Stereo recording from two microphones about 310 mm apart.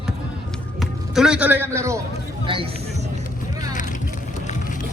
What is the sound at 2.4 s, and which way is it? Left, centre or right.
Speech, centre.